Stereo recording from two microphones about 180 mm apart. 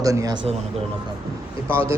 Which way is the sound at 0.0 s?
20° right (ahead or behind).